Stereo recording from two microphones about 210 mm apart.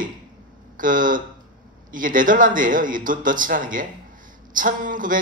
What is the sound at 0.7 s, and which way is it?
Speech, 40° right (ahead or behind).